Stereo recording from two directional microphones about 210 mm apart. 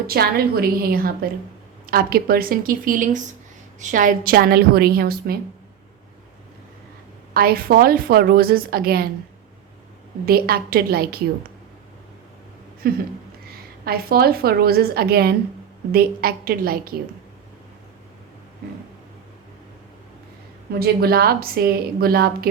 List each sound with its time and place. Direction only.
0.1 s a woman's voice: 45° right (ahead or behind)
7.3 s a woman's voice: 45° right (ahead or behind)
10.2 s a woman's voice: 45° right (ahead or behind)
12.8 s a woman's voice: 45° right (ahead or behind)
20.7 s a woman's voice: 45° right (ahead or behind)